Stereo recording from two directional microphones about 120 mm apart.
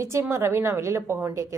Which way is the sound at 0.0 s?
20° right (ahead or behind).